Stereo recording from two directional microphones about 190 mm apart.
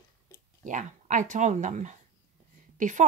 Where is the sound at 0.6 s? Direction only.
40° right (ahead or behind).